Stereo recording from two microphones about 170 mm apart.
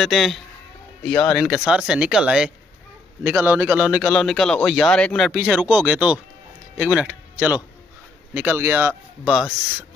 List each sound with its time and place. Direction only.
0.0 s speech: centre (ahead or behind)
5.3 s speech: 5° right (ahead or behind)
9.3 s speech: centre (ahead or behind)